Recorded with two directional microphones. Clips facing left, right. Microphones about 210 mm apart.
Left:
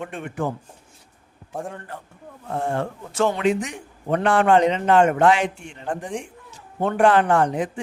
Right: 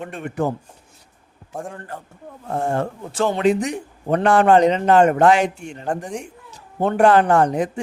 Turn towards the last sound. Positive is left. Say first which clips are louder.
# right 3 dB
turn(degrees=-40)  # may be behind; listen again after turning